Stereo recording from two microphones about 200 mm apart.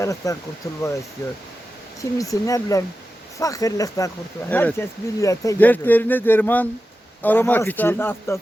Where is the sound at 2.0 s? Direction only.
15° left (ahead or behind).